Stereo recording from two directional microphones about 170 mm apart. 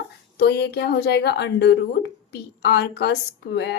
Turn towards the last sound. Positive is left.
turn(degrees=90)